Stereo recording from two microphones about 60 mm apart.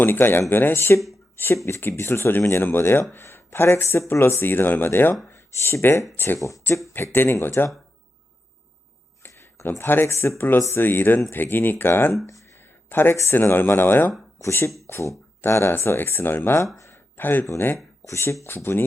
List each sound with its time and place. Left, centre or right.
0.0 s speech: left
9.2 s a sound: left
9.6 s speech: left
10.8 s speech: left
12.3 s a sound: left
12.5 s a sound: left
13.3 s speech: left
14.3 s speech: left
16.7 s a sound: left
17.2 s speech: left
18.0 s speech: left
18.4 s speech: left